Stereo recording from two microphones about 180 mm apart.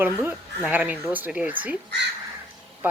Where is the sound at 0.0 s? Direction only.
10° right (ahead or behind).